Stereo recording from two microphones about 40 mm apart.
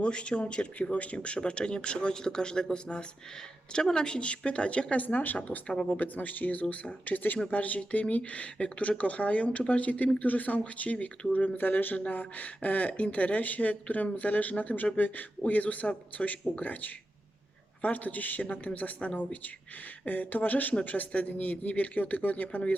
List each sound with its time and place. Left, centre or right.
0.0 s speech: left
7.3 s speech: left
11.3 s speech: left
11.9 s speech: left